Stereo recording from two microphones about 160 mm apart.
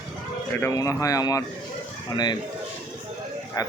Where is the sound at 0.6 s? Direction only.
20° left (ahead or behind).